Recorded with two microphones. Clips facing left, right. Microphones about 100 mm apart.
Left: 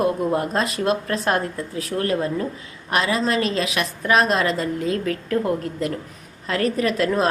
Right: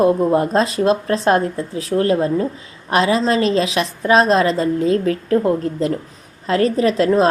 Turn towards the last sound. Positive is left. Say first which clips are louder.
# right 6 dB
turn(degrees=-25)  # may be behind; listen again after turning